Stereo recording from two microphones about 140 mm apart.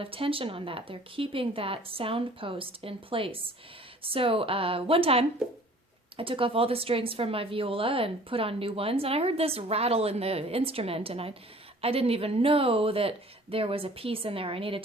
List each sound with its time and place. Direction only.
0.0 s speech: 40° right (ahead or behind)